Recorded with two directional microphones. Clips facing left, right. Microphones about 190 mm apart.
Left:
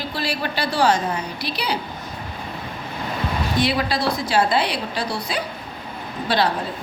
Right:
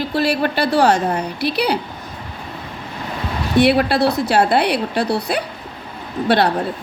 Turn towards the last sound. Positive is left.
turn(degrees=-60)  # may be behind; listen again after turning